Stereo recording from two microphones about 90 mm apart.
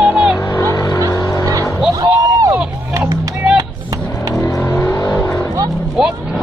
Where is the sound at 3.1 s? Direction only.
40° right (ahead or behind).